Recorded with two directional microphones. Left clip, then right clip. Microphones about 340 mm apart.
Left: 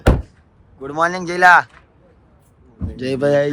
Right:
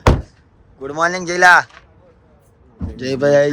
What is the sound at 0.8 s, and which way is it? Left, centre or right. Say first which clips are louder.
Speech: right 1 dB; centre.